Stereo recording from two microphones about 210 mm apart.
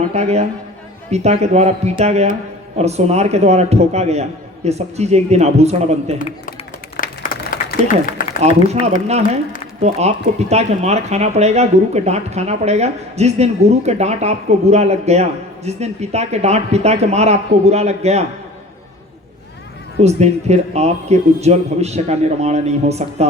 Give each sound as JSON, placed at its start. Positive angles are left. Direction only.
{"t": 0.1, "sound": "speech", "side_deg": -30}
{"t": 6.1, "sound": "a man's voice", "side_deg": 40}
{"t": 6.9, "sound": "a sound", "side_deg": 40}
{"t": 8.4, "sound": "speech", "side_deg": -30}
{"t": 20.0, "sound": "speech", "side_deg": -30}